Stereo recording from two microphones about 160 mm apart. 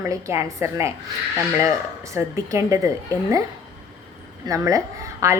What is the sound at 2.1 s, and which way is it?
A woman's voice, 20° right (ahead or behind).